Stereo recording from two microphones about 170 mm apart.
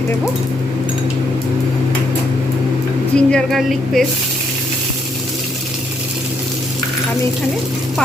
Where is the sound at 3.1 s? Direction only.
5° left (ahead or behind).